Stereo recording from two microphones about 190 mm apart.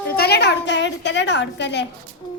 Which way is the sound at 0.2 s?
60° left (ahead or behind).